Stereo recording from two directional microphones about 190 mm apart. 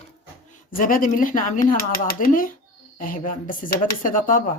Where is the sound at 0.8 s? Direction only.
45° left (ahead or behind).